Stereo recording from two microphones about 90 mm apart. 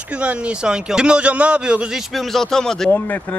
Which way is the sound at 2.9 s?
20° left (ahead or behind).